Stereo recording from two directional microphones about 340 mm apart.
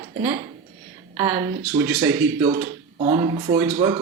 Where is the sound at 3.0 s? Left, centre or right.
Centre.